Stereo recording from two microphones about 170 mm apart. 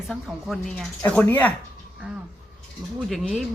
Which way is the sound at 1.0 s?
10° left (ahead or behind).